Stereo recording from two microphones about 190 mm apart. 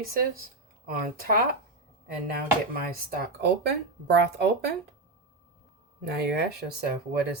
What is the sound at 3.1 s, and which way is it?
Speech, 60° right (ahead or behind).